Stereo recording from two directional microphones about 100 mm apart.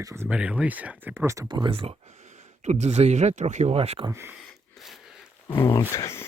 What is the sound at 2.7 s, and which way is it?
Speech, 90° right.